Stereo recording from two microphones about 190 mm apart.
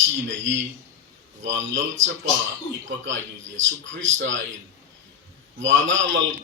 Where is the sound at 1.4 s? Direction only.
75° right (ahead or behind).